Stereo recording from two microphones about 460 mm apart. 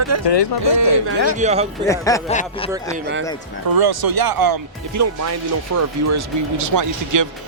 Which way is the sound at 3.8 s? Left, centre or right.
Right.